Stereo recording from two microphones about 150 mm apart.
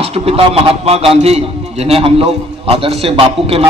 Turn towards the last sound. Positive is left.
turn(degrees=-40)  # may be behind; listen again after turning